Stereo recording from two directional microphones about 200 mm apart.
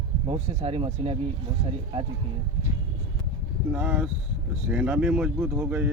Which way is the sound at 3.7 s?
5° right (ahead or behind).